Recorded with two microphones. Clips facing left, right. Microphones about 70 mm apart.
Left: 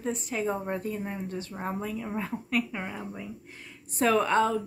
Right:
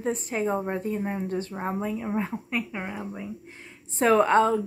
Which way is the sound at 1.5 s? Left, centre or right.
Right.